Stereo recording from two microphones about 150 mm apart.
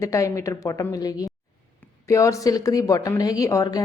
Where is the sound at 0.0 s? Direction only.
20° left (ahead or behind).